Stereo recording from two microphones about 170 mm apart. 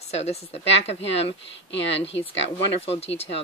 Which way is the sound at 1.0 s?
90° left.